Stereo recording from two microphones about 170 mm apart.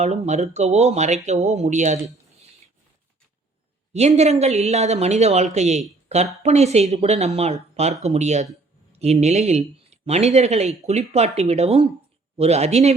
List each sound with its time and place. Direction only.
0.0 s speech: 40° right (ahead or behind)
3.9 s speech: 40° right (ahead or behind)